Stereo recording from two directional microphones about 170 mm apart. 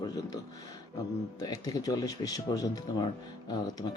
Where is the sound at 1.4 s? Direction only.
20° left (ahead or behind).